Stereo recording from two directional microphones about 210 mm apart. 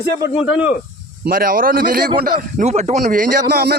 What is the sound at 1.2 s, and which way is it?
A man's voice, 40° right (ahead or behind).